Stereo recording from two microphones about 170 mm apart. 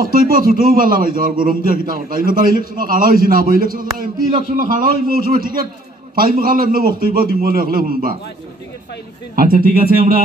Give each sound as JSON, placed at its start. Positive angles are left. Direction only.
{"t": 0.0, "sound": "a man's voice", "side_deg": -55}
{"t": 9.3, "sound": "a man's voice", "side_deg": -60}